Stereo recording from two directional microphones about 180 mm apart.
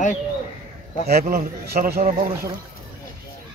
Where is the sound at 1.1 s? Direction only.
60° right (ahead or behind).